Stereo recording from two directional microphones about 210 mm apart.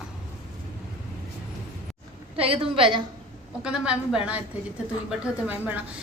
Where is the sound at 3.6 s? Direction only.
5° right (ahead or behind).